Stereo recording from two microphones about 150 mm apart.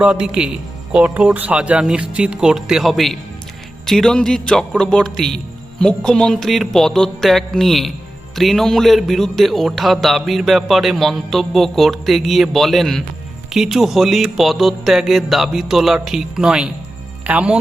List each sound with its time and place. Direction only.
0.0 s speech: 5° right (ahead or behind)